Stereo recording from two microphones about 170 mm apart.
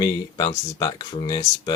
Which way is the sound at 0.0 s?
25° left (ahead or behind).